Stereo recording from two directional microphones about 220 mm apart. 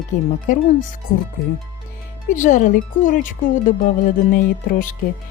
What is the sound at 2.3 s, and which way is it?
A woman's voice, 35° left (ahead or behind).